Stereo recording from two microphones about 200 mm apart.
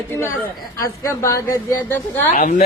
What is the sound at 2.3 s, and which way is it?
Speech, 35° left (ahead or behind).